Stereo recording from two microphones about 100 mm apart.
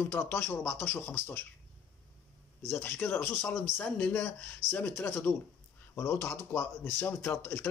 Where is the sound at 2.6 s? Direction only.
20° left (ahead or behind).